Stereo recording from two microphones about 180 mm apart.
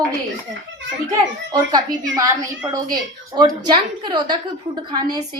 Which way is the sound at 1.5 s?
20° right (ahead or behind).